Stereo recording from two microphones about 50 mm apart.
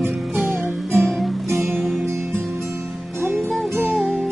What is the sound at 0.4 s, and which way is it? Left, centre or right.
Music, centre.